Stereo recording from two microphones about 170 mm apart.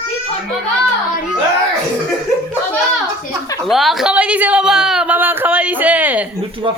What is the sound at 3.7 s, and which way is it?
Speech, centre (ahead or behind).